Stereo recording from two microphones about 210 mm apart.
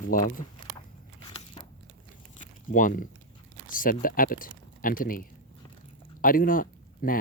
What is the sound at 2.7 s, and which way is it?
Speech, 40° left (ahead or behind).